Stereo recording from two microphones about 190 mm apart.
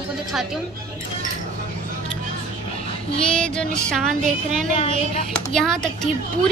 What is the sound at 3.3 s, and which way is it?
Speech, 5° left (ahead or behind).